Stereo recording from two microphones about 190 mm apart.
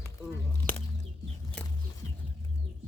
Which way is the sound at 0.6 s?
45° right (ahead or behind).